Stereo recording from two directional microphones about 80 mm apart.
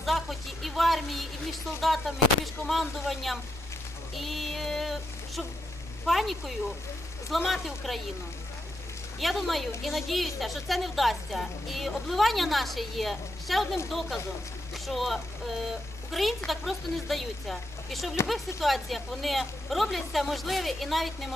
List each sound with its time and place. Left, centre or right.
0.0 s a sound: centre
1.8 s a woman's voice: centre
9.1 s a woman's voice: centre